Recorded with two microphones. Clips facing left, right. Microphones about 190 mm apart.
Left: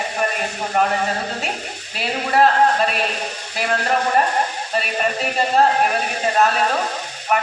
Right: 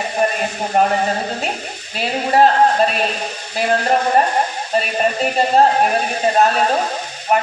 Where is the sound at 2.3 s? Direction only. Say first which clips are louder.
Right 2 dB; 30° right (ahead or behind).